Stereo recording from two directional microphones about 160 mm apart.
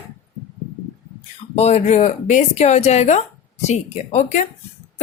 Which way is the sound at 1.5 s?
40° left (ahead or behind).